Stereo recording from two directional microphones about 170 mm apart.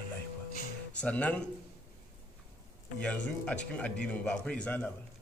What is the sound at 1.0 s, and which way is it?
Speech, 5° left (ahead or behind).